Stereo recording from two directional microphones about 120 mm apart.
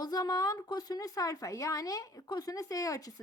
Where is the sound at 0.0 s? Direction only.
35° left (ahead or behind).